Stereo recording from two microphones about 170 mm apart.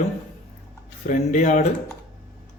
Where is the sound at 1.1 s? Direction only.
45° left (ahead or behind).